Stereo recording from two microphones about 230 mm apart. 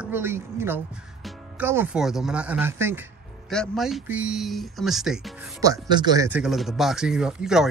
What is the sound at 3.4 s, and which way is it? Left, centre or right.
Speech, centre.